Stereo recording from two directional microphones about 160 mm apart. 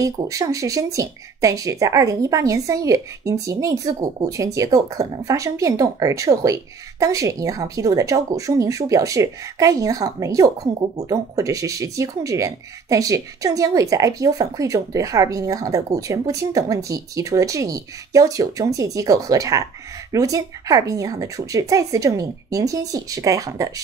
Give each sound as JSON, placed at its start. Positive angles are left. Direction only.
{"t": 0.0, "sound": "speech", "side_deg": -20}